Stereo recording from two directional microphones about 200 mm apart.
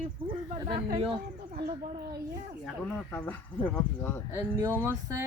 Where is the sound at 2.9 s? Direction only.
10° left (ahead or behind).